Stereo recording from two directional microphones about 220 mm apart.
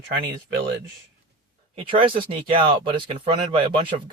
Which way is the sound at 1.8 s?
25° right (ahead or behind).